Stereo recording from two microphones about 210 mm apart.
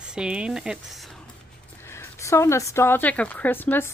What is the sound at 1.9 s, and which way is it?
Speech, 15° left (ahead or behind).